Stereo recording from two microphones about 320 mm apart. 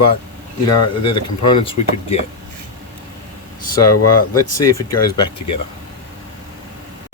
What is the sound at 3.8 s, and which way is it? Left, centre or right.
Speech, left.